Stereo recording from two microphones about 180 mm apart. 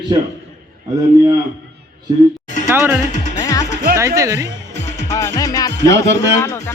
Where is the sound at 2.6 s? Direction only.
10° right (ahead or behind).